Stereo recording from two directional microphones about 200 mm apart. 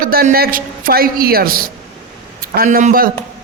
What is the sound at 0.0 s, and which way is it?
Speech, 45° right (ahead or behind).